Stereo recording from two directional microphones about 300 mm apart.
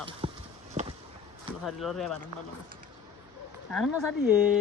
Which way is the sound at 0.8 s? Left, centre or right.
Right.